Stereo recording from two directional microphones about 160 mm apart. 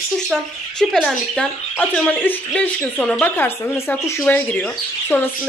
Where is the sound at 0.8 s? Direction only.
Centre (ahead or behind).